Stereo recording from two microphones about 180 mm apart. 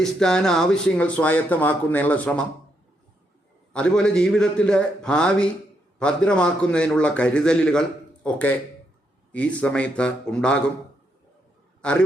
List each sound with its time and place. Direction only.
0.0 s speech: 5° left (ahead or behind)
3.7 s a man's voice: 5° left (ahead or behind)
11.8 s a man's voice: 5° left (ahead or behind)